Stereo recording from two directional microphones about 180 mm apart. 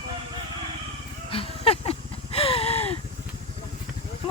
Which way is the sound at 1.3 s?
30° left (ahead or behind).